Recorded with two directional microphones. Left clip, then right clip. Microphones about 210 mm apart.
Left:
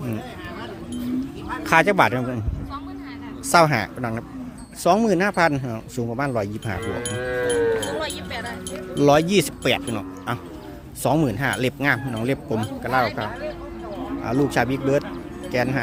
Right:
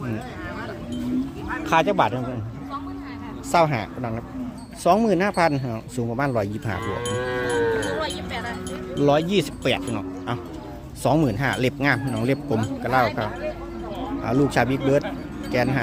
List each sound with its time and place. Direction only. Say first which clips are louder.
1.6 s speech: left 3 dB; 25° left (ahead or behind)
3.5 s speech: left 3 dB; 25° left (ahead or behind); by 6.7 s 5° left (ahead or behind)
6.8 s cattle: right 1 dB; 50° right (ahead or behind)
7.9 s music: even; 50° left (ahead or behind)
9.0 s speech: left 3 dB; 25° left (ahead or behind); by 13.0 s 5° left (ahead or behind)
13.0 s speech: right 1 dB; 15° left (ahead or behind)